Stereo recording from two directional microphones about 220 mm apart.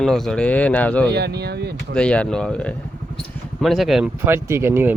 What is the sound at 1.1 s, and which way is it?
Speech, 50° right (ahead or behind).